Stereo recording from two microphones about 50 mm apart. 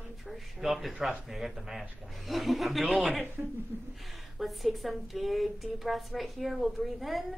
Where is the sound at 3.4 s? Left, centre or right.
Right.